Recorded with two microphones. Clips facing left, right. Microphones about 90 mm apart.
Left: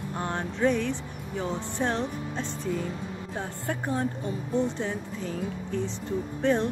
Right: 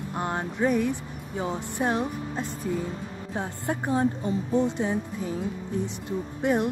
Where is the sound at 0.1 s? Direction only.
15° right (ahead or behind).